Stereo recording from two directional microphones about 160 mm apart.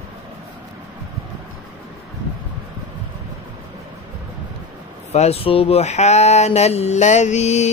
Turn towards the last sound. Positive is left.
turn(degrees=45)  # may be behind; listen again after turning